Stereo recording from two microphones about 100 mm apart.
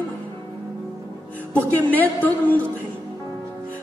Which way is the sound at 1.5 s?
15° left (ahead or behind).